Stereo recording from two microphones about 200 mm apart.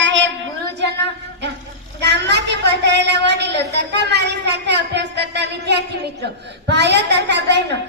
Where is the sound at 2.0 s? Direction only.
60° right (ahead or behind).